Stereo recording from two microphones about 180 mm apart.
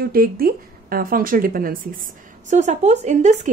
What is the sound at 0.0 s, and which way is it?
A woman's voice, 55° right (ahead or behind).